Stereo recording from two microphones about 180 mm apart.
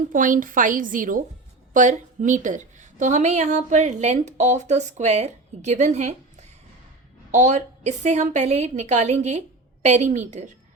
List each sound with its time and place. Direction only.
0.0 s a woman's voice: 45° right (ahead or behind)